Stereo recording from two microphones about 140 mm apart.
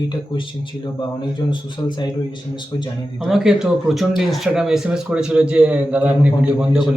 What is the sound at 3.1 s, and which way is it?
A man's voice, centre (ahead or behind).